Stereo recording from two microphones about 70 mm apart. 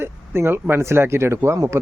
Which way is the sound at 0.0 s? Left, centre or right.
Right.